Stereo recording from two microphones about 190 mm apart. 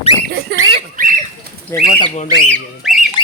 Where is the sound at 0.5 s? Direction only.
65° right (ahead or behind).